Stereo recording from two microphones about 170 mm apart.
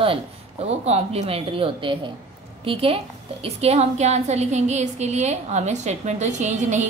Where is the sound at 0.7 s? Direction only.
40° right (ahead or behind).